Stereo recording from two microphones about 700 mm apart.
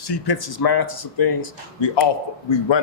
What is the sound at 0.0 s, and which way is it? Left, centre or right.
A man's voice, left.